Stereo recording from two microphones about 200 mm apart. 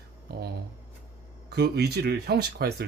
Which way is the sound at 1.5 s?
55° right (ahead or behind).